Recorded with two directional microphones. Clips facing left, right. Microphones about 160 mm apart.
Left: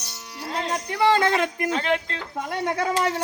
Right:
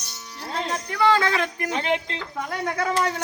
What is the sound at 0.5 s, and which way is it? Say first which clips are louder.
Speech: left 1 dB; 20° left (ahead or behind).